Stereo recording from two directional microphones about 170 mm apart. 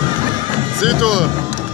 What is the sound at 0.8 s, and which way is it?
Speech, 5° right (ahead or behind).